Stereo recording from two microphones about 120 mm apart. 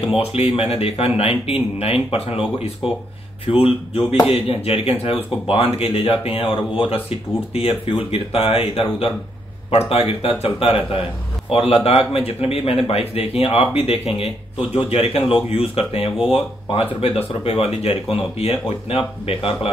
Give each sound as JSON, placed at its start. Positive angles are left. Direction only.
{"t": 0.2, "sound": "speech", "side_deg": 55}